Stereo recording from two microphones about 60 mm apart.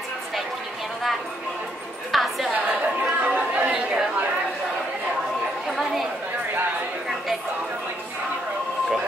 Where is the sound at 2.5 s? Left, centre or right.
Right.